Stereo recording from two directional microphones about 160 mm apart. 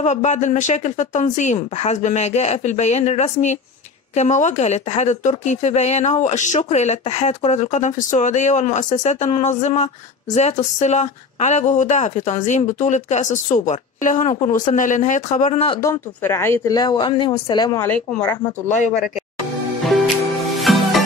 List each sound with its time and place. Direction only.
0.0 s speech: 50° left (ahead or behind)
15.8 s speech: 15° left (ahead or behind)
17.7 s speech: 10° left (ahead or behind)
20.6 s music: centre (ahead or behind)